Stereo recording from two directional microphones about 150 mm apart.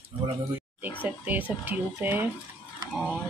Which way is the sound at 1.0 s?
10° right (ahead or behind).